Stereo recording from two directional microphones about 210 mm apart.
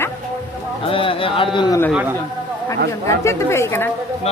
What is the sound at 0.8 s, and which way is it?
Speech, 25° left (ahead or behind).